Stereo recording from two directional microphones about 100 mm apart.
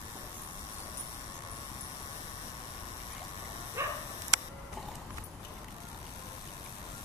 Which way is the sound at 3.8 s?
25° right (ahead or behind).